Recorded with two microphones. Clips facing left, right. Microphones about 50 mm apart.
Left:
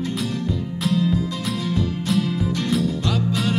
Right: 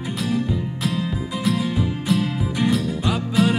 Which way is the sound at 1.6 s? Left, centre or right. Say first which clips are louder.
Right 1 dB; centre.